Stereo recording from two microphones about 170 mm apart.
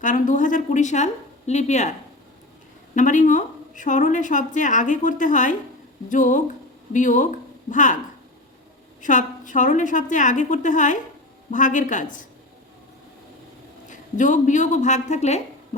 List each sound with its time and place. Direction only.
0.0 s a woman's voice: 50° left (ahead or behind)
2.9 s a woman's voice: 50° left (ahead or behind)
9.0 s a woman's voice: 50° left (ahead or behind)
13.9 s a woman's voice: 50° left (ahead or behind)